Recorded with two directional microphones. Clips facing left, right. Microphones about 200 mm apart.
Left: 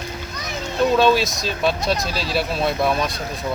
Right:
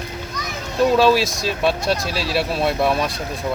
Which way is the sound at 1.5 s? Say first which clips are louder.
Right 2 dB; centre (ahead or behind).